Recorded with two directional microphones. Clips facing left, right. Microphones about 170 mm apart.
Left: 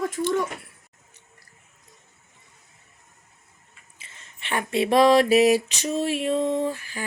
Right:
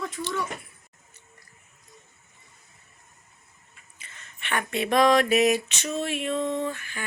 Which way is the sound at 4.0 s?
25° left (ahead or behind).